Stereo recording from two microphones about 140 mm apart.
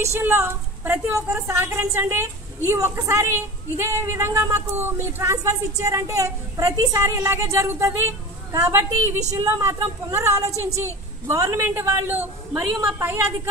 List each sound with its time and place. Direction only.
0.0 s a woman's voice: 20° right (ahead or behind)